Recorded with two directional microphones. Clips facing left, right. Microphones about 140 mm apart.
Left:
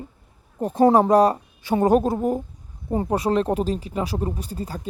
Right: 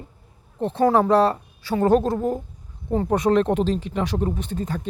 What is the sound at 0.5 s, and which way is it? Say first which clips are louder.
Speech: left 2 dB; 10° left (ahead or behind).